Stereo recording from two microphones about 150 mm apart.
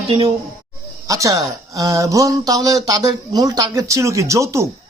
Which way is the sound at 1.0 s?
20° right (ahead or behind).